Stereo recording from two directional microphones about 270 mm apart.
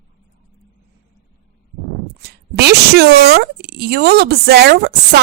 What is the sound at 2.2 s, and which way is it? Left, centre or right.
Speech, right.